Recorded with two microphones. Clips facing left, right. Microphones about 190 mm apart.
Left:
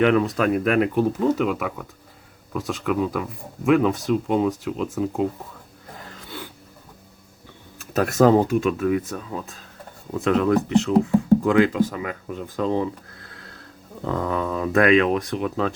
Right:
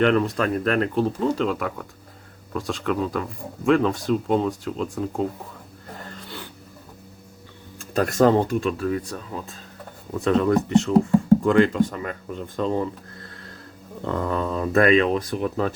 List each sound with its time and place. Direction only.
0.0 s speech: 5° left (ahead or behind)
6.0 s wheeze: centre (ahead or behind)
7.9 s speech: 5° left (ahead or behind)
13.1 s a sound: centre (ahead or behind)
14.0 s speech: centre (ahead or behind)